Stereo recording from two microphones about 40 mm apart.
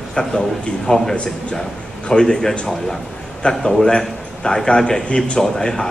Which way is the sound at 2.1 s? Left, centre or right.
Centre.